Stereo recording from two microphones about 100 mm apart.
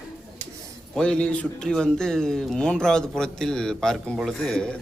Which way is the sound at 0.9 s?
5° left (ahead or behind).